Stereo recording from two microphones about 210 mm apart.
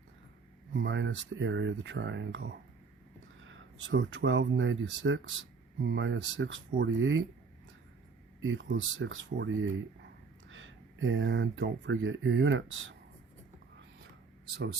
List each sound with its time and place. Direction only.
0.7 s speech: 60° right (ahead or behind)
8.4 s speech: 65° right (ahead or behind)